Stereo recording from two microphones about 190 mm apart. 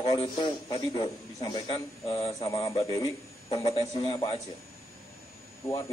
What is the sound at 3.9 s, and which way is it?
Speech, 25° left (ahead or behind).